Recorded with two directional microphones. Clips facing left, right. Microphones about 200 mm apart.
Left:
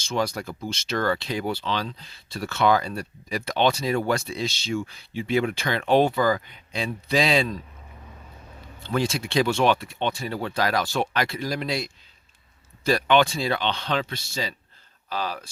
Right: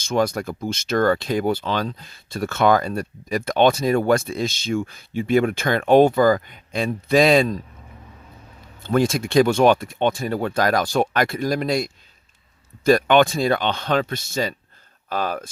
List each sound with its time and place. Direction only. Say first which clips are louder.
0.0 s speech: right 5 dB; 50° right (ahead or behind)
8.8 s speech: right 6 dB; 50° right (ahead or behind)